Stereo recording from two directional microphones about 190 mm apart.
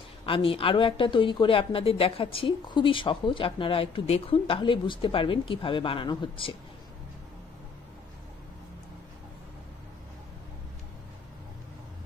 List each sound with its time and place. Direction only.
0.2 s a woman's voice: 30° left (ahead or behind)